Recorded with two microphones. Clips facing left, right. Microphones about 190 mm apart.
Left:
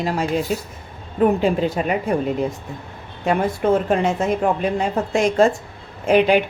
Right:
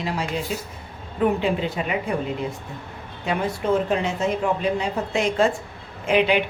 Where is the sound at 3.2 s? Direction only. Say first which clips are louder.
Left 5 dB; 50° left (ahead or behind).